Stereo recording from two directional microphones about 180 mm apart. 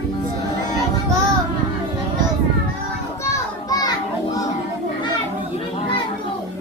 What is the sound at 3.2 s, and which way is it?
Children playing, 20° left (ahead or behind).